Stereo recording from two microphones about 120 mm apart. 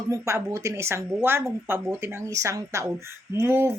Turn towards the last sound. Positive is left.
turn(degrees=-20)  # may be behind; listen again after turning